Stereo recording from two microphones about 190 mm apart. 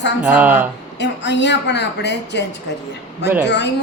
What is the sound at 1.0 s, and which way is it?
Speech, 65° left (ahead or behind).